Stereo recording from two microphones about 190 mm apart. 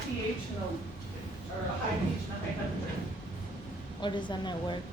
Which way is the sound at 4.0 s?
25° left (ahead or behind).